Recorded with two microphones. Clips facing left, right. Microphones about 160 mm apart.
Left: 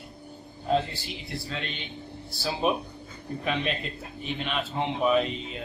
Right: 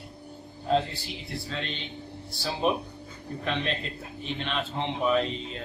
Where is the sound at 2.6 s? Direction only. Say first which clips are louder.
Even; 5° left (ahead or behind).